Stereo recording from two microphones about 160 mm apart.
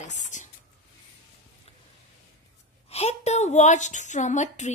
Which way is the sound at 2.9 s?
40° left (ahead or behind).